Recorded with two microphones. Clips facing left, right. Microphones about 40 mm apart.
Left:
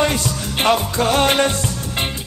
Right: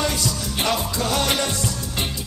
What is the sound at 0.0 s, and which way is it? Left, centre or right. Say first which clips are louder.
Music: left 5 dB; left.